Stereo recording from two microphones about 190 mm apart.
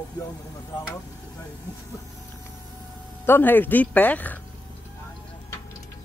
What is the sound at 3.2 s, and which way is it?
Speech, 10° left (ahead or behind).